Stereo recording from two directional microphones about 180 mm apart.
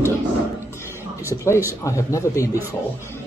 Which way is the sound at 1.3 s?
15° left (ahead or behind).